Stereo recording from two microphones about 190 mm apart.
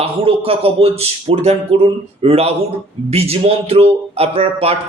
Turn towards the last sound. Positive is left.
turn(degrees=-30)  # may be behind; listen again after turning